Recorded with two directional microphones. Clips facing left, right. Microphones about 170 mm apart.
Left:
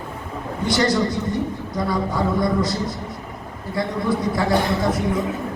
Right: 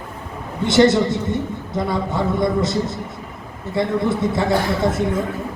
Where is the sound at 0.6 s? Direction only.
25° right (ahead or behind).